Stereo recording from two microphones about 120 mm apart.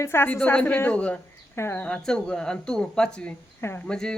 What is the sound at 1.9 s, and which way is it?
Speech, 5° left (ahead or behind).